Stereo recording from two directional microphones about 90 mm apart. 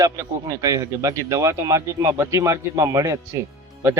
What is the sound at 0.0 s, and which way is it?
Speech, 35° right (ahead or behind).